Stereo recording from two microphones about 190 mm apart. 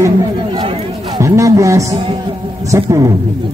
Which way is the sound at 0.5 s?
30° right (ahead or behind).